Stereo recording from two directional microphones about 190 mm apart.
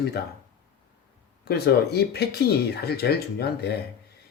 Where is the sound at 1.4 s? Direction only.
55° left (ahead or behind).